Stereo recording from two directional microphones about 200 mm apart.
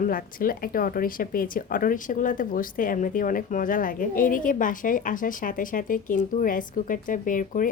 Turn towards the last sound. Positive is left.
turn(degrees=40)  # may be behind; listen again after turning